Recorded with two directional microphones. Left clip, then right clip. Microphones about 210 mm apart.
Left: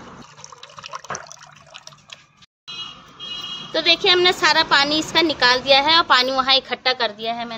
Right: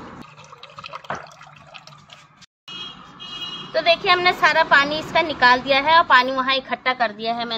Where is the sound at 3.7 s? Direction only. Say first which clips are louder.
Left 1 dB; 45° left (ahead or behind).